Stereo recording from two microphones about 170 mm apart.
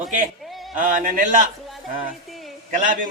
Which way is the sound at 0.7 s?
50° right (ahead or behind).